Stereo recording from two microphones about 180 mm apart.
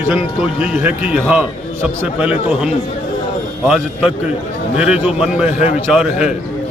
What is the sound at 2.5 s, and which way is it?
Speech, 5° right (ahead or behind).